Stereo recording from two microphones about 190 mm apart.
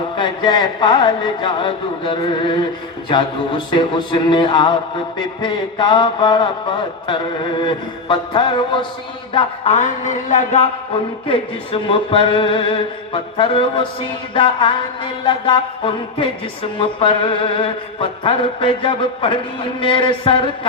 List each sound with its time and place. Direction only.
0.2 s music: 20° left (ahead or behind)
9.3 s speech: 30° left (ahead or behind)
11.3 s music: 25° left (ahead or behind)